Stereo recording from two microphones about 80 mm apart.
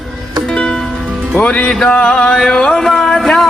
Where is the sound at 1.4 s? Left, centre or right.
Centre.